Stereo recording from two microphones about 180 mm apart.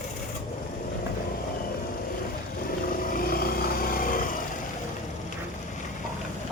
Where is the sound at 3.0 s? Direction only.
50° left (ahead or behind).